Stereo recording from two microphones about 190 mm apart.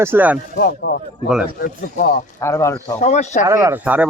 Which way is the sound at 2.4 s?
15° left (ahead or behind).